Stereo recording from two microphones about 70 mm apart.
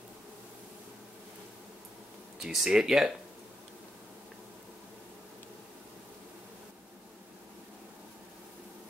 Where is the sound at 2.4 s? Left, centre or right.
Centre.